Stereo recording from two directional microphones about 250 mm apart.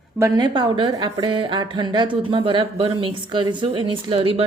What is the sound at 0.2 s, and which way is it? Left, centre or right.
A woman's voice, centre.